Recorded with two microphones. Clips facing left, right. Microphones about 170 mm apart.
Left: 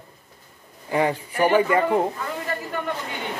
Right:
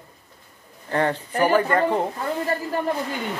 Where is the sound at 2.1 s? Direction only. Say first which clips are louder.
Right 4 dB; 35° right (ahead or behind).